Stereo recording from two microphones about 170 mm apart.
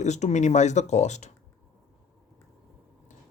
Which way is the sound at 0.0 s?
45° left (ahead or behind).